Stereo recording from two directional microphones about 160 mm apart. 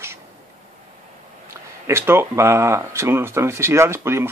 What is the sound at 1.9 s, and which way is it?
Speech, 15° right (ahead or behind).